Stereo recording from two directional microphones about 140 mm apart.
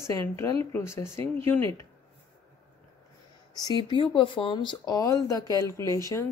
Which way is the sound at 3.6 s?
35° left (ahead or behind).